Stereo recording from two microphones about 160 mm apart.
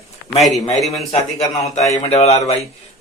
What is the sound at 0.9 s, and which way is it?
Speech, 40° left (ahead or behind).